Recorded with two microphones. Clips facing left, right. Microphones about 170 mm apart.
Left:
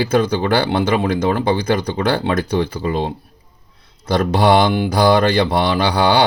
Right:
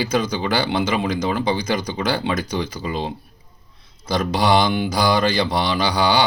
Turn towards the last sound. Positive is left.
turn(degrees=60)  # may be behind; listen again after turning